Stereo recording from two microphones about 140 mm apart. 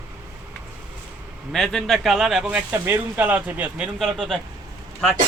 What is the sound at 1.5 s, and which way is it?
Speech, centre (ahead or behind).